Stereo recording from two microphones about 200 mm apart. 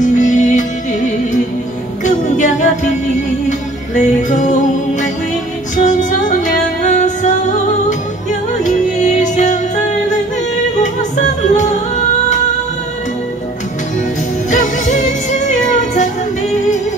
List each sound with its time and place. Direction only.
0.0 s music: 40° left (ahead or behind)
2.0 s music: 40° left (ahead or behind)
14.5 s music: 40° left (ahead or behind)